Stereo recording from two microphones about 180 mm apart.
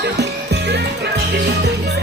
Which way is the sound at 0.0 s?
70° right (ahead or behind).